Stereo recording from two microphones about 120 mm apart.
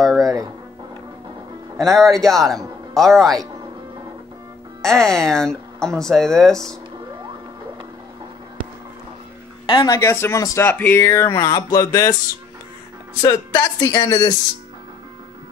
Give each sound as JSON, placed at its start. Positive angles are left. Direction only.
{"t": 0.0, "sound": "a sound", "side_deg": 0}
{"t": 1.8, "sound": "speech", "side_deg": 0}
{"t": 4.8, "sound": "speech", "side_deg": 5}
{"t": 9.7, "sound": "a woman's voice", "side_deg": 40}
{"t": 9.9, "sound": "speech", "side_deg": 20}
{"t": 13.2, "sound": "speech", "side_deg": 30}